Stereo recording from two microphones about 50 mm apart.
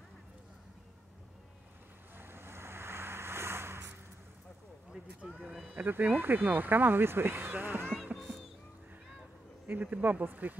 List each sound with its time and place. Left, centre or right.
2.1 s vehicle: right
5.2 s a sound: centre
5.7 s speech: right
8.2 s music: centre
9.7 s speech: right